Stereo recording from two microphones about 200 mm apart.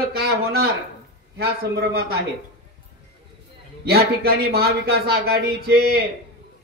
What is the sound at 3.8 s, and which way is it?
Speech, 50° right (ahead or behind).